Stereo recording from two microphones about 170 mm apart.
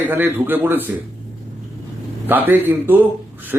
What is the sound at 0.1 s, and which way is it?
Speech, 10° right (ahead or behind).